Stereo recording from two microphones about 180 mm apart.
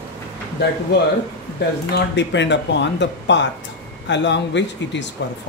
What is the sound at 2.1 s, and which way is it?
Speech, 80° left.